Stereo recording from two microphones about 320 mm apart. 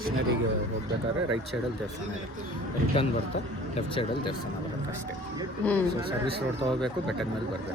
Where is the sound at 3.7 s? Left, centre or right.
Centre.